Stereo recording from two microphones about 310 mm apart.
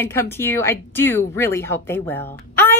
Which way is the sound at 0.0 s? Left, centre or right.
Centre.